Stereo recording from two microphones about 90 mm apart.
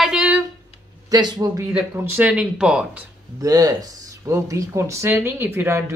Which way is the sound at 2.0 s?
25° right (ahead or behind).